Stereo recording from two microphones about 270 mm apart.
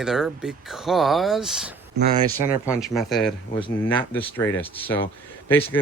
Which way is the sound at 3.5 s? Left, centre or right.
Centre.